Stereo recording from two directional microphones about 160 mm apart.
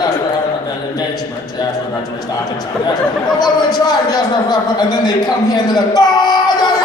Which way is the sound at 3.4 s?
25° left (ahead or behind).